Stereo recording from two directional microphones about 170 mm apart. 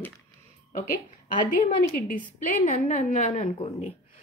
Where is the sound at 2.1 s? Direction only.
50° left (ahead or behind).